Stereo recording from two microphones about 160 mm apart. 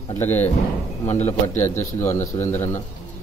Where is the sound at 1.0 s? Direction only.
45° left (ahead or behind).